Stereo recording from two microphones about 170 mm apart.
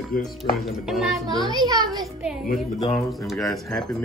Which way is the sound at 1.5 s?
25° right (ahead or behind).